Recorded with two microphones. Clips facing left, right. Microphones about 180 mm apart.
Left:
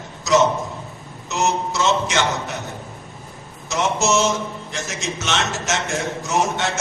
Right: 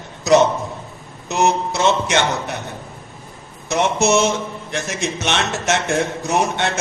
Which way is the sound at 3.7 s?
60° right (ahead or behind).